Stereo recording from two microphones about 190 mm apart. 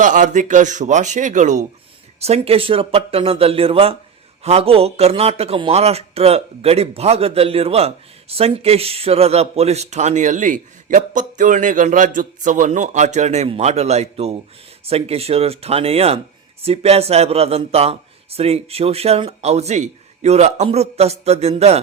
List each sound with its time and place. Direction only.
0.0 s a man's voice: 40° right (ahead or behind)